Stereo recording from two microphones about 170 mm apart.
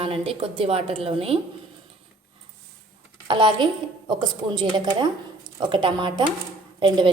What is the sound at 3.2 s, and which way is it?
A woman's voice, 30° right (ahead or behind).